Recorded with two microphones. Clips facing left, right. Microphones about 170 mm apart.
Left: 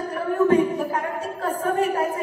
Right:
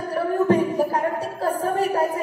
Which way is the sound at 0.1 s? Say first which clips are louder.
Even; 35° right (ahead or behind).